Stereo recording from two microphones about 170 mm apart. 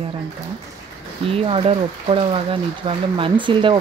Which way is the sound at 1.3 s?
35° right (ahead or behind).